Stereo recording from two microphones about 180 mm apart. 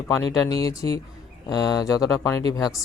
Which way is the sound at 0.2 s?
20° left (ahead or behind).